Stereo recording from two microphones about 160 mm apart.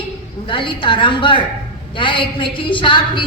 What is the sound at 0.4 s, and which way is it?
A woman's voice, 30° left (ahead or behind).